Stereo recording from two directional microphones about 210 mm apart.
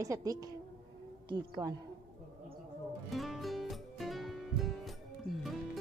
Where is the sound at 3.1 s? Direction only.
Centre (ahead or behind).